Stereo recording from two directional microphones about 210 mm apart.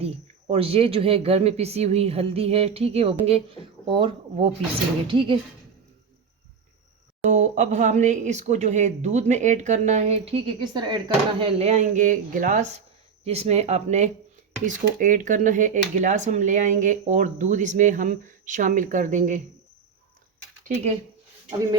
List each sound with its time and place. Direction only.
0.5 s speech: 30° right (ahead or behind)
7.3 s speech: 35° right (ahead or behind)